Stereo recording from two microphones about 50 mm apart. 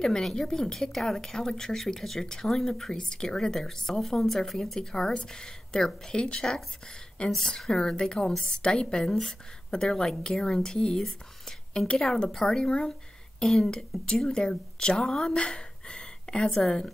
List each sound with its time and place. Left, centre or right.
0.0 s speech: centre
6.2 s speech: left
8.6 s speech: centre